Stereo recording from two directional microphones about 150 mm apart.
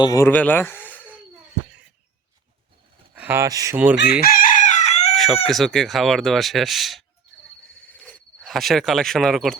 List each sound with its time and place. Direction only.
0.0 s speech: 20° left (ahead or behind)
0.3 s speech: 10° left (ahead or behind)
3.2 s speech: 15° right (ahead or behind)
4.2 s chicken: 70° left (ahead or behind); by 5.1 s 45° left (ahead or behind)
5.1 s speech: centre (ahead or behind)
7.8 s cricket: 10° left (ahead or behind)